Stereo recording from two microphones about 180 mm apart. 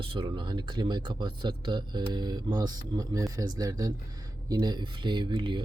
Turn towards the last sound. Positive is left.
turn(degrees=-25)  # may be behind; listen again after turning